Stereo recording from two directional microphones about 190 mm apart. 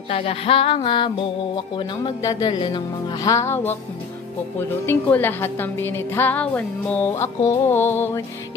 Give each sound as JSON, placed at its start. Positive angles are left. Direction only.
{"t": 0.1, "sound": "a woman's voice", "side_deg": 30}